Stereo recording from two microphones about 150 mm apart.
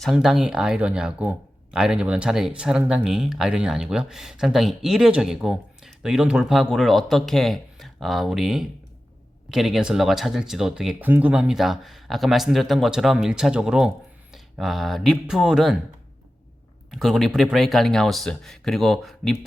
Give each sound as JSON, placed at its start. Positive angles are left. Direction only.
{"t": 0.0, "sound": "speech", "side_deg": 0}
{"t": 16.9, "sound": "speech", "side_deg": 0}